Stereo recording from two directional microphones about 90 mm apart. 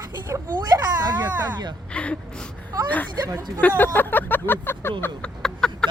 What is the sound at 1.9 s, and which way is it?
Gasp, 10° left (ahead or behind).